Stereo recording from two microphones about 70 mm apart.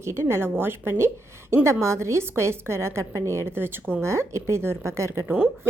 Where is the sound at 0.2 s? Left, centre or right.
Right.